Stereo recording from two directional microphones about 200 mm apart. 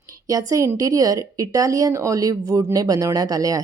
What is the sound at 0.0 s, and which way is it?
A woman's voice, 15° right (ahead or behind).